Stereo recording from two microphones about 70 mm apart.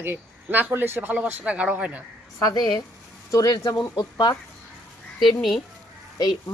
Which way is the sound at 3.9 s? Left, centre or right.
Left.